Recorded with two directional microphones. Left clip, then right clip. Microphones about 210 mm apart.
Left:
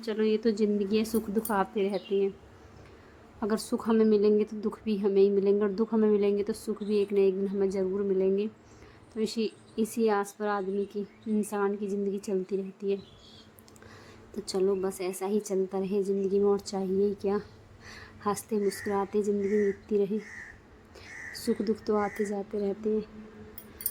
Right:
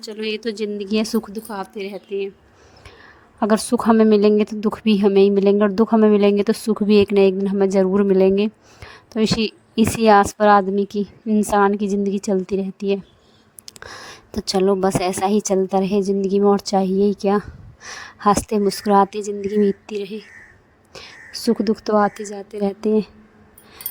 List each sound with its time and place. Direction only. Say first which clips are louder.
0.2 s a woman's voice: right 3 dB; 45° right (ahead or behind)
1.5 s a woman's voice: even; centre (ahead or behind)
3.4 s a woman's voice: right 13 dB; 40° right (ahead or behind)